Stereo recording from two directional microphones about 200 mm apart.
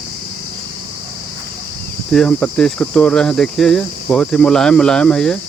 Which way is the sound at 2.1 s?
5° left (ahead or behind).